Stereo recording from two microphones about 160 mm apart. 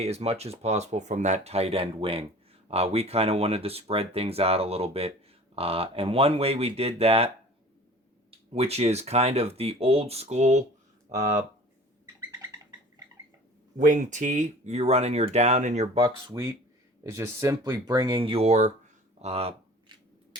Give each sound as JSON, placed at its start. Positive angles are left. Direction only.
{"t": 0.0, "sound": "speech", "side_deg": -40}
{"t": 8.3, "sound": "speech", "side_deg": -40}
{"t": 13.7, "sound": "speech", "side_deg": -55}
{"t": 16.3, "sound": "speech", "side_deg": -20}